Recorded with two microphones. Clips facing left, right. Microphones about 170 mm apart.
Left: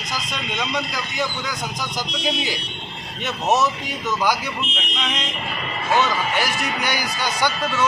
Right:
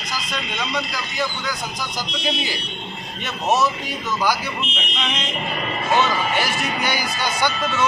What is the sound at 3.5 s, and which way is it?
Speech, 20° left (ahead or behind).